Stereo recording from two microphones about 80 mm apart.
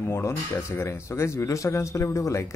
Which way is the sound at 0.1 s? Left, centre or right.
Left.